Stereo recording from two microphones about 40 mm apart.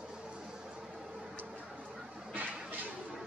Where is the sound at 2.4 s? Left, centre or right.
Right.